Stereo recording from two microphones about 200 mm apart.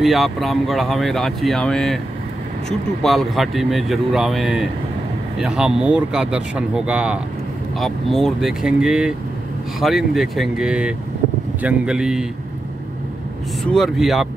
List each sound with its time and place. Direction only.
0.0 s speech: centre (ahead or behind)
3.0 s speech: centre (ahead or behind)
13.7 s speech: centre (ahead or behind)